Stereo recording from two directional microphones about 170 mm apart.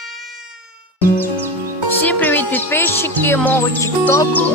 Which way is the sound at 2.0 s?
10° left (ahead or behind).